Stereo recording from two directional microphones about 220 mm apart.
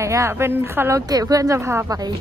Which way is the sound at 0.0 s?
15° right (ahead or behind).